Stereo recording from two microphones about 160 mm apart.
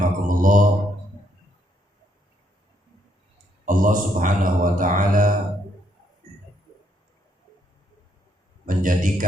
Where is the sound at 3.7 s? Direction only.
60° right (ahead or behind).